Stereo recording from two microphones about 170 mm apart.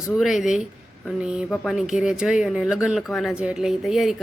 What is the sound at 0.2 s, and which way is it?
Speech, centre (ahead or behind).